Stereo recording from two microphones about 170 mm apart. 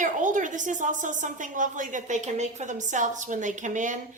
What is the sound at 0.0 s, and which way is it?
A woman's voice, 50° right (ahead or behind).